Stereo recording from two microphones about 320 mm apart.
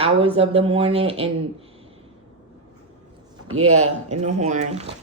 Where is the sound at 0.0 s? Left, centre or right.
Centre.